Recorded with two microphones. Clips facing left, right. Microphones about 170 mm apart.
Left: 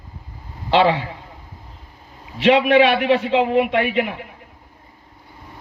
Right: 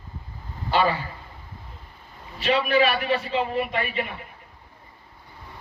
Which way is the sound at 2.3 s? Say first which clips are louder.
Left 7 dB; 90° left.